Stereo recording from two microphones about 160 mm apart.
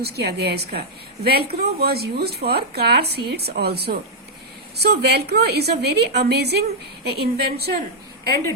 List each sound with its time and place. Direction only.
0.0 s a woman's voice: 90° right